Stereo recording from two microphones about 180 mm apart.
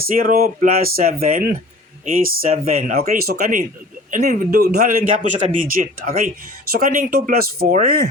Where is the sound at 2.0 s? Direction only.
40° right (ahead or behind).